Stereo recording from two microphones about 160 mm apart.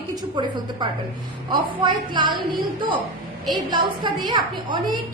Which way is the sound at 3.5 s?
30° right (ahead or behind).